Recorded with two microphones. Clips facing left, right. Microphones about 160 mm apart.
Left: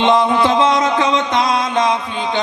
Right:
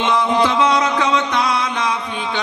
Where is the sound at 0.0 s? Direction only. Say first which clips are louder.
Left 5 dB; 20° left (ahead or behind).